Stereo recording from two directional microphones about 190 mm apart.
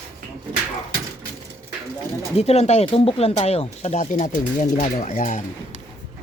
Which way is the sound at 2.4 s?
35° left (ahead or behind).